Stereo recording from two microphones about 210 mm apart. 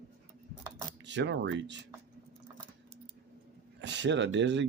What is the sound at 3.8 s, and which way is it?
Speech, 55° right (ahead or behind).